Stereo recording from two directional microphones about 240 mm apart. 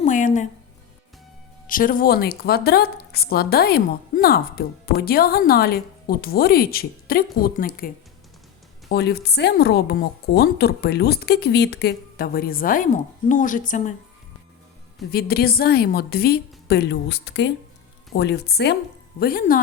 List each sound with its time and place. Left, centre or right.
0.0 s speech: left
1.6 s speech: left
8.9 s speech: left
15.1 s speech: left